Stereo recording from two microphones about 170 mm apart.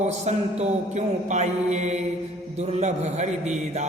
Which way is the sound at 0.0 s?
40° right (ahead or behind).